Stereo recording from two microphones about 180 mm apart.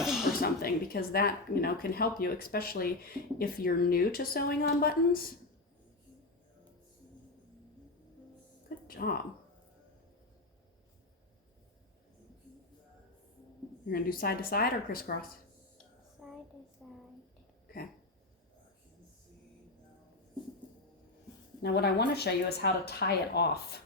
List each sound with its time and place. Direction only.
0.0 s a sound: centre (ahead or behind)
0.4 s speech: 55° left (ahead or behind)
8.9 s speech: 55° left (ahead or behind)
13.8 s speech: 55° left (ahead or behind)
16.2 s child singing: centre (ahead or behind)
16.8 s a sound: centre (ahead or behind)
21.6 s speech: 65° left (ahead or behind)